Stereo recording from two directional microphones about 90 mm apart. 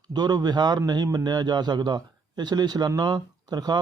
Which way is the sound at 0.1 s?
50° right (ahead or behind).